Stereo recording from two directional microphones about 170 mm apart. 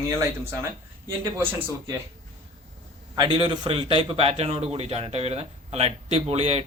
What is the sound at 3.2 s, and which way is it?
A man's voice, 25° right (ahead or behind).